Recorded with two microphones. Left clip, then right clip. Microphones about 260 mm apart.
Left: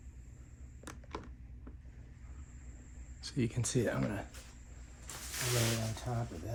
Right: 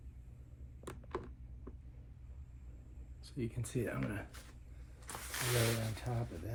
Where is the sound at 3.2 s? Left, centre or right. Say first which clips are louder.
Left 7 dB; left.